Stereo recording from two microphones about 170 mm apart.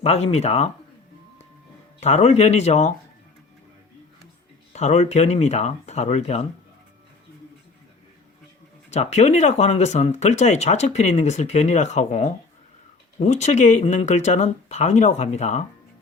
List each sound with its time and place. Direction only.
0.0 s speech: 35° left (ahead or behind)
2.0 s speech: 40° left (ahead or behind)
4.7 s speech: 40° left (ahead or behind)
8.9 s speech: 40° left (ahead or behind)